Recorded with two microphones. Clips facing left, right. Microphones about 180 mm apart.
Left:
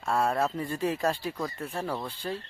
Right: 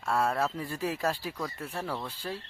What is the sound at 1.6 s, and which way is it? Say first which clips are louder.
Speech: left 2 dB; 15° left (ahead or behind).